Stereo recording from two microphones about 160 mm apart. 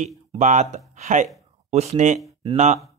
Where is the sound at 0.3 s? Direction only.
45° right (ahead or behind).